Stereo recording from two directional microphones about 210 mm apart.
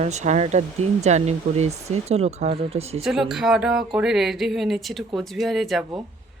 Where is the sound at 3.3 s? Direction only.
Centre (ahead or behind).